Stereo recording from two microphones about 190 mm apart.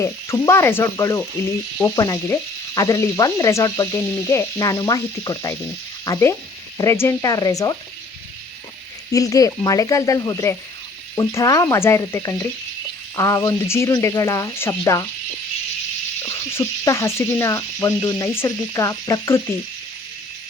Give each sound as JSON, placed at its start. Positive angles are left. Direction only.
{"t": 0.0, "sound": "speech", "side_deg": 15}
{"t": 9.1, "sound": "speech", "side_deg": 20}
{"t": 16.2, "sound": "speech", "side_deg": 15}